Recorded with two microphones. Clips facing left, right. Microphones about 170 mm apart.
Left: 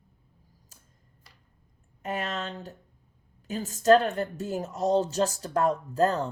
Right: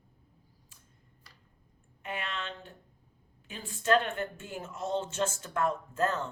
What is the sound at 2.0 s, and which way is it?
A woman's voice, 40° left (ahead or behind).